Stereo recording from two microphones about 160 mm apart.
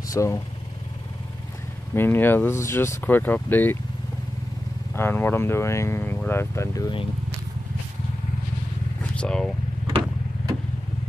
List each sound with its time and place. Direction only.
0.1 s speech: 20° left (ahead or behind)
2.0 s speech: 10° left (ahead or behind)
4.9 s speech: 15° left (ahead or behind)
9.1 s speech: 5° left (ahead or behind)